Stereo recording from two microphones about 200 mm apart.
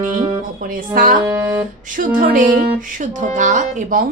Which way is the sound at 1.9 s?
40° right (ahead or behind).